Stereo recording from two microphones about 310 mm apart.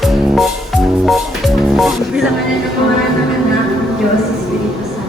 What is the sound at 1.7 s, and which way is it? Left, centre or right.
Music, centre.